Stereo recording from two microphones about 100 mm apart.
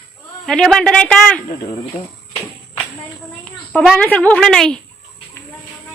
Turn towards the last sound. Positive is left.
turn(degrees=5)  # may be behind; listen again after turning